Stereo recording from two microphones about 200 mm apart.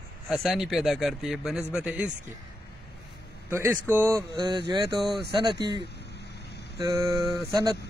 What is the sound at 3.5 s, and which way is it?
Speech, 15° right (ahead or behind).